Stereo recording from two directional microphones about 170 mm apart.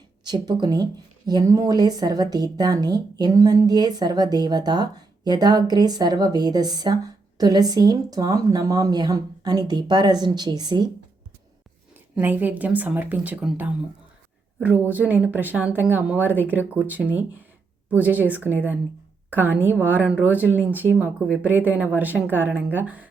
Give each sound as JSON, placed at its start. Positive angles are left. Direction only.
{"t": 0.3, "sound": "a woman's voice", "side_deg": -25}
{"t": 12.1, "sound": "a woman's voice", "side_deg": -10}
{"t": 14.8, "sound": "a woman's voice", "side_deg": -10}